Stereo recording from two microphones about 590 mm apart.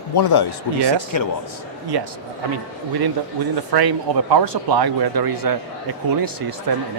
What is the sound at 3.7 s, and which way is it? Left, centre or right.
Speech, right.